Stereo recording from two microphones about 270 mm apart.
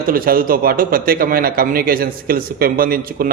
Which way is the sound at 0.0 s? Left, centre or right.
Right.